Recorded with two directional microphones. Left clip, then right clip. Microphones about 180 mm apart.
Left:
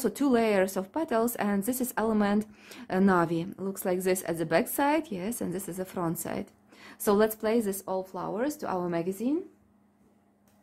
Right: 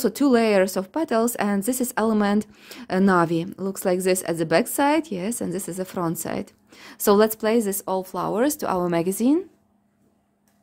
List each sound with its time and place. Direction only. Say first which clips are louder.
0.0 s speech: right 6 dB; 25° right (ahead or behind); by 9.4 s 55° right (ahead or behind)